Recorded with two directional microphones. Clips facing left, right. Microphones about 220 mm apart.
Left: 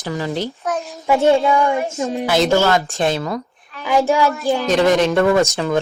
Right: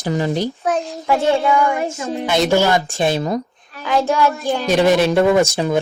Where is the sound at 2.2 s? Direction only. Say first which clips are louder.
Even; centre (ahead or behind).